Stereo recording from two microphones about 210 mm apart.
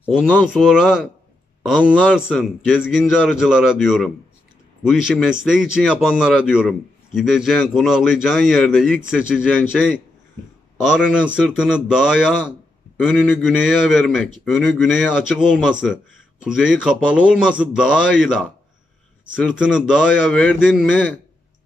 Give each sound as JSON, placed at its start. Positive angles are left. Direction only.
{"t": 0.5, "sound": "a man's voice", "side_deg": -5}
{"t": 19.6, "sound": "a man's voice", "side_deg": -5}